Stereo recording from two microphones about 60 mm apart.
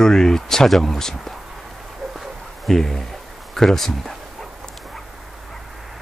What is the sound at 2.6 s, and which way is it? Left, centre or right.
Speech, centre.